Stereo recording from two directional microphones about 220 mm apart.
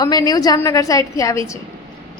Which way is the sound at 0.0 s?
15° left (ahead or behind).